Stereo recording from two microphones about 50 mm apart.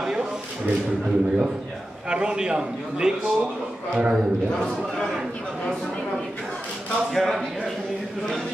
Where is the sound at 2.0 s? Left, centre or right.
Centre.